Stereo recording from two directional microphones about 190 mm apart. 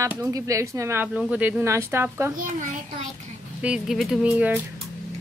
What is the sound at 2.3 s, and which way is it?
Speech, 45° right (ahead or behind).